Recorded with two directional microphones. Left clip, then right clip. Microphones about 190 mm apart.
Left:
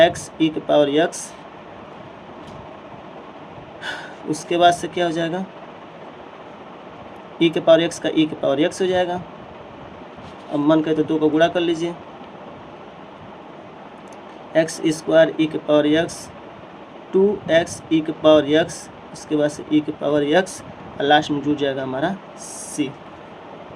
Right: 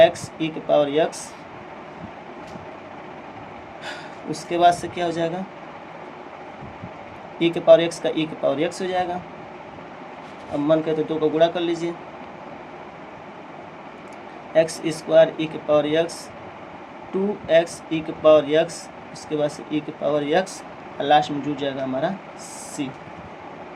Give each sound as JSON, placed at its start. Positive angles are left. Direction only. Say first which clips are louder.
{"t": 0.0, "sound": "speech", "louder": "left 1 dB", "side_deg": 30}
{"t": 4.4, "sound": "speech", "louder": "left 2 dB", "side_deg": 30}
{"t": 7.3, "sound": "speech", "louder": "even", "side_deg": 25}
{"t": 10.7, "sound": "speech", "louder": "left 3 dB", "side_deg": 25}
{"t": 14.5, "sound": "speech", "louder": "left 1 dB", "side_deg": 30}
{"t": 17.5, "sound": "speech", "louder": "left 1 dB", "side_deg": 30}